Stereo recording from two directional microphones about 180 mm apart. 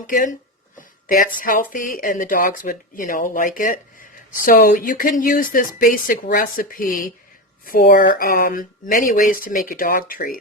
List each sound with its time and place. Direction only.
0.1 s speech: 45° left (ahead or behind)